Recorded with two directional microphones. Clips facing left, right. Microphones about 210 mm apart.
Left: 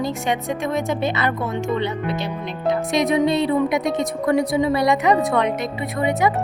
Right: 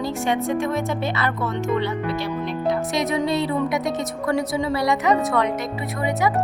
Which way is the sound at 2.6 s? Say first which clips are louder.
Left 4 dB; 20° left (ahead or behind).